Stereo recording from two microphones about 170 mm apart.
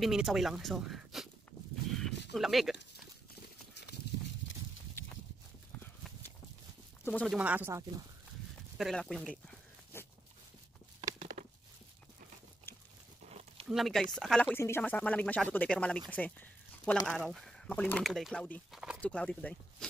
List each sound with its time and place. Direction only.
0.0 s speech: centre (ahead or behind)
2.3 s speech: centre (ahead or behind)
7.1 s speech: 10° left (ahead or behind)
7.3 s speech: 10° right (ahead or behind)
8.7 s speech: centre (ahead or behind)
9.9 s dog: 15° left (ahead or behind)
11.0 s a sound: 45° right (ahead or behind)
13.2 s a sound: 40° right (ahead or behind)
13.7 s speech: centre (ahead or behind)
16.1 s a sound: 10° left (ahead or behind)
17.1 s speech: centre (ahead or behind)
18.7 s speech: 5° right (ahead or behind)
18.9 s speech: 5° left (ahead or behind)